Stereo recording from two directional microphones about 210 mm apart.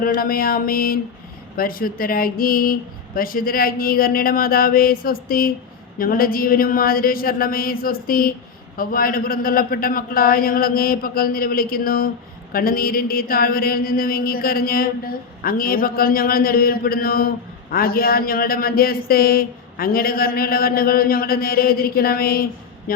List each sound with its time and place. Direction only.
0.0 s speech: 45° left (ahead or behind)